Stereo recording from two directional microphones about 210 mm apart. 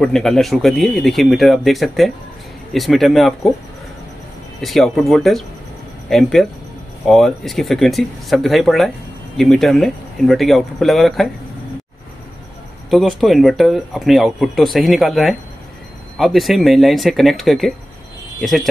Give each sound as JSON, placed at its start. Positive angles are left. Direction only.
{"t": 0.0, "sound": "speech", "side_deg": 0}
{"t": 4.6, "sound": "speech", "side_deg": 0}
{"t": 12.9, "sound": "speech", "side_deg": 0}